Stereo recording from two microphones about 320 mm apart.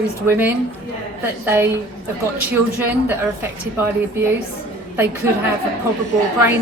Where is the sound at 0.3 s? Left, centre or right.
Centre.